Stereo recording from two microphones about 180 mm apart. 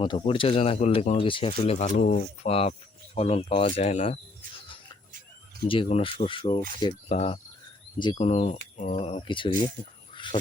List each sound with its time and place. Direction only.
0.0 s speech: 30° left (ahead or behind)
2.0 s speech: 50° left (ahead or behind)
2.5 s speech: 35° left (ahead or behind)
5.6 s speech: 30° left (ahead or behind)